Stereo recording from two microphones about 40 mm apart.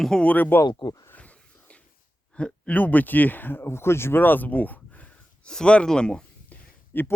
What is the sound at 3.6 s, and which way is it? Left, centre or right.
Speech, left.